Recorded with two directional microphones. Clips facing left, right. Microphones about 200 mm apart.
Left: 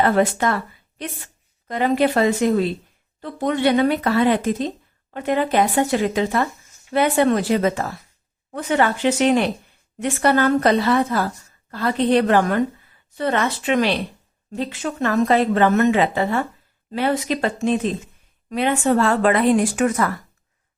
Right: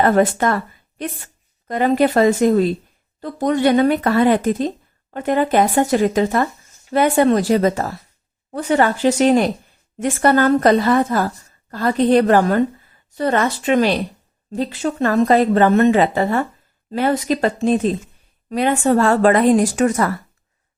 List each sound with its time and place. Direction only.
0.0 s speech: 45° right (ahead or behind)
1.6 s a woman's voice: 45° right (ahead or behind)